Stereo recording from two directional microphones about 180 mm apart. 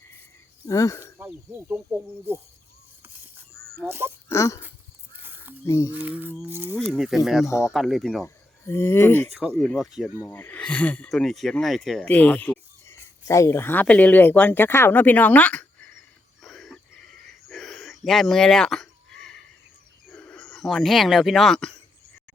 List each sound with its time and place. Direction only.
0.7 s speech: 20° left (ahead or behind)
1.2 s speech: 10° right (ahead or behind)
3.8 s speech: 15° right (ahead or behind)
4.3 s speech: 15° left (ahead or behind)
5.2 s a sound: 10° right (ahead or behind)
5.6 s speech: 15° left (ahead or behind)
5.9 s speech: 10° right (ahead or behind)
7.4 s speech: 15° left (ahead or behind)
7.7 s speech: centre (ahead or behind)
8.2 s speech: 15° left (ahead or behind)
10.2 s speech: 10° left (ahead or behind)
16.4 s a sound: centre (ahead or behind)
20.1 s speech: 5° left (ahead or behind)